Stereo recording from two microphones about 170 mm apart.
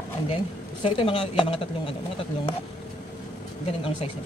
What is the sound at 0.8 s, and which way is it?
A woman's voice, 30° left (ahead or behind).